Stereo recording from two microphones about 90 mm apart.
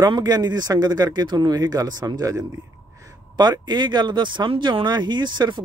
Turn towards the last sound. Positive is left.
turn(degrees=-55)  # may be behind; listen again after turning